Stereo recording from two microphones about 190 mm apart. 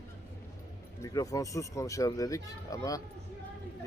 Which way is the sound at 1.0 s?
20° left (ahead or behind).